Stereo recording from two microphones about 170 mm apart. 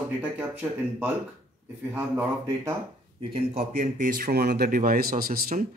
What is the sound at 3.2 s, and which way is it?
Speech, 35° right (ahead or behind).